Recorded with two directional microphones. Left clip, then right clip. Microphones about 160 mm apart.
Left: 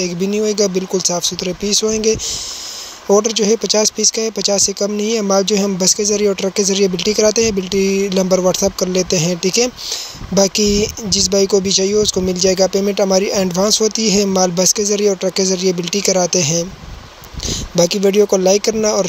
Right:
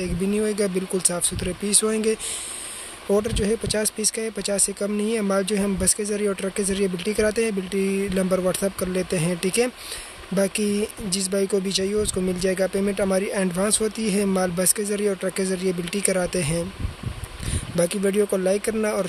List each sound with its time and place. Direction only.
0.5 s speech: 15° left (ahead or behind)
17.7 s speech: 25° left (ahead or behind)